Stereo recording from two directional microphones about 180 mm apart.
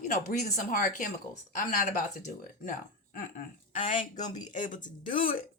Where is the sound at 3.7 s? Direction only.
45° left (ahead or behind).